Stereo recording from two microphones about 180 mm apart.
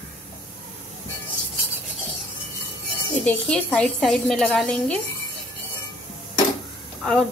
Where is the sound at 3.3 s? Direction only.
5° left (ahead or behind).